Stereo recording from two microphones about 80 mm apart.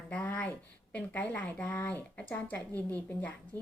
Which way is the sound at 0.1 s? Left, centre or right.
Centre.